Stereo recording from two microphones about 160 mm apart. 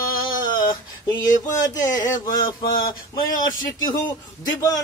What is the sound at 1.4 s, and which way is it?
Speech, 20° left (ahead or behind).